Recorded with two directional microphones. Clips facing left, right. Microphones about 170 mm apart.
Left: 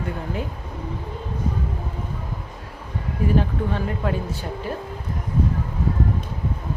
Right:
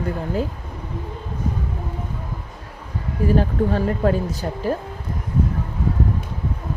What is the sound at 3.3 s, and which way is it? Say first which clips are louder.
Speech: right 4 dB; 40° right (ahead or behind).